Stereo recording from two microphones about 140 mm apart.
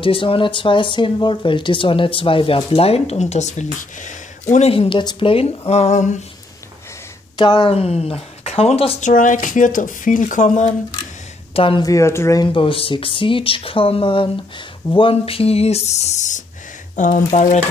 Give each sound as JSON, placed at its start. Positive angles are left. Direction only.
{"t": 0.0, "sound": "speech", "side_deg": 40}
{"t": 5.7, "sound": "speech", "side_deg": 55}
{"t": 7.3, "sound": "speech", "side_deg": 30}
{"t": 7.7, "sound": "speech", "side_deg": 45}
{"t": 9.0, "sound": "speech", "side_deg": 65}
{"t": 11.5, "sound": "speech", "side_deg": 40}
{"t": 11.8, "sound": "speech", "side_deg": 20}
{"t": 12.5, "sound": "speech", "side_deg": 40}